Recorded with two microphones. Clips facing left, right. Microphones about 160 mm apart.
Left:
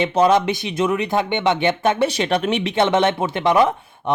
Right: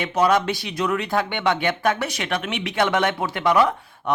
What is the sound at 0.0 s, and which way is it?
Speech, 25° left (ahead or behind).